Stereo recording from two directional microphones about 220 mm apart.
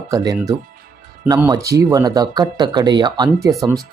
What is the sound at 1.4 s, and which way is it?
Speech, 10° right (ahead or behind).